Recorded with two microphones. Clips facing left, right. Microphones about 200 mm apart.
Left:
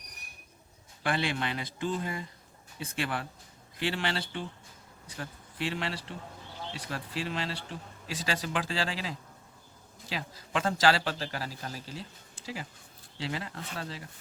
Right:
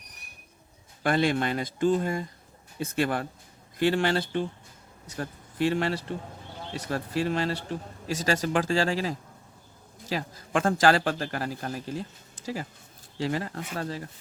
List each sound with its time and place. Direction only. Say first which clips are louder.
1.0 s speech: right 7 dB; 45° right (ahead or behind)
13.1 s speech: right 7 dB; 45° right (ahead or behind)